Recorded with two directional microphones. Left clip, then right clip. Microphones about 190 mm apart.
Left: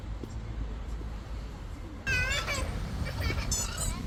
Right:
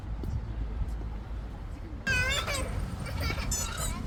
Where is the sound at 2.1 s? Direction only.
65° right (ahead or behind).